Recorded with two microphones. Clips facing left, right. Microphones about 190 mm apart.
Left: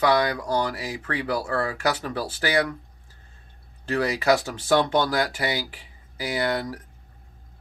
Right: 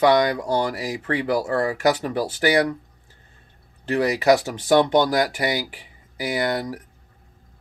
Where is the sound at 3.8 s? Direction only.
15° right (ahead or behind).